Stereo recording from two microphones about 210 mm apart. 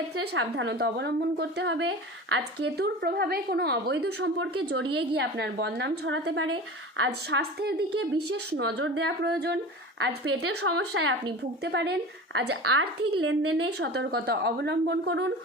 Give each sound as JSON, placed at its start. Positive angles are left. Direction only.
{"t": 0.5, "sound": "a woman's voice", "side_deg": -55}
{"t": 8.3, "sound": "a woman's voice", "side_deg": -90}
{"t": 9.0, "sound": "a woman's voice", "side_deg": -55}
{"t": 10.0, "sound": "a woman's voice", "side_deg": -70}
{"t": 10.6, "sound": "a woman's voice", "side_deg": -85}
{"t": 11.6, "sound": "a woman's voice", "side_deg": -55}
{"t": 13.7, "sound": "a woman's voice", "side_deg": -55}